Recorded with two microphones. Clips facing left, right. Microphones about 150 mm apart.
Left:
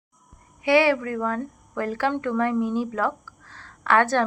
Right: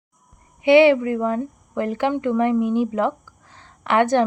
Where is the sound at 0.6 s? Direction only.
20° right (ahead or behind).